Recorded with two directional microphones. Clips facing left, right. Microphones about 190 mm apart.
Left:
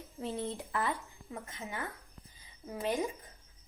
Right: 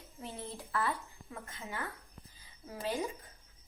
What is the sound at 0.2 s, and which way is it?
Speech, 30° left (ahead or behind).